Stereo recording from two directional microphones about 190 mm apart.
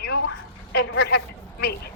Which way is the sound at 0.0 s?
60° left (ahead or behind).